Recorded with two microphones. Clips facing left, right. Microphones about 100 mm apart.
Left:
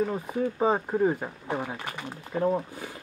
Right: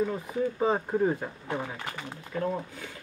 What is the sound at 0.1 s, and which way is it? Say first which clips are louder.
Speech: left 1 dB; 20° left (ahead or behind).